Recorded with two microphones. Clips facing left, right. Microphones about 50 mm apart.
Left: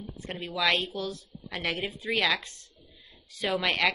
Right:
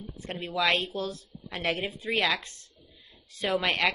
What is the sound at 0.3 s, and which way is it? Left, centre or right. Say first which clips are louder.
A woman's voice: right 1 dB; right.